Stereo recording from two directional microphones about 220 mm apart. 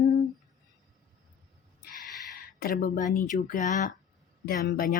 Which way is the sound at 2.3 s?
45° left (ahead or behind).